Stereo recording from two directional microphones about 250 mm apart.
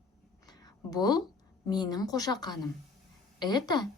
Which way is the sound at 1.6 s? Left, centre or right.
Centre.